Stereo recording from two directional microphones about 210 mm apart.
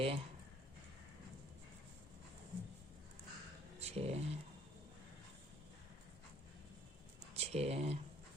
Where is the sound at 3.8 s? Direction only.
30° right (ahead or behind).